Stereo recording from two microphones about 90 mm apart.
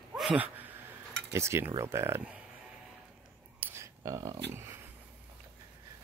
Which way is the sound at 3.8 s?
35° right (ahead or behind).